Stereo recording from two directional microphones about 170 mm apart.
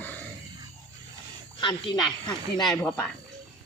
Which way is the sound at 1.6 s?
30° left (ahead or behind).